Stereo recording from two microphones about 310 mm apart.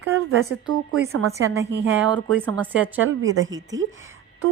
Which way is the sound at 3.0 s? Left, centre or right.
Right.